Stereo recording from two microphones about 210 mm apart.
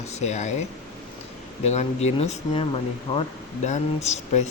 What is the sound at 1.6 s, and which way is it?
Speech, 30° left (ahead or behind).